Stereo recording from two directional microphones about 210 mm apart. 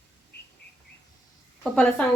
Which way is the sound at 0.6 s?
50° left (ahead or behind).